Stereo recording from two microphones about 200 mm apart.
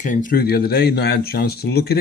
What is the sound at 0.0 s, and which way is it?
Speech, 40° left (ahead or behind).